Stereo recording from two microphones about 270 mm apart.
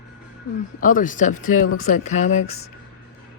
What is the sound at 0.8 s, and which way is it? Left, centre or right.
Speech, left.